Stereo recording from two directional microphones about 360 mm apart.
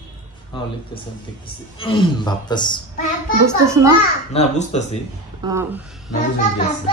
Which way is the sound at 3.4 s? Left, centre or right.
Centre.